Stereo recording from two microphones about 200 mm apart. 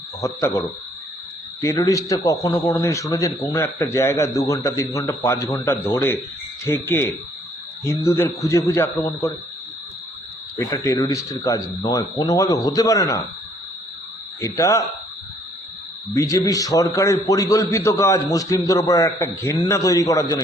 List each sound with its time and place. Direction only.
0.2 s a man's voice: 15° left (ahead or behind)
1.6 s a man's voice: 15° left (ahead or behind)
10.6 s a man's voice: 15° left (ahead or behind)
14.4 s a man's voice: 15° left (ahead or behind)
16.1 s a man's voice: 15° left (ahead or behind)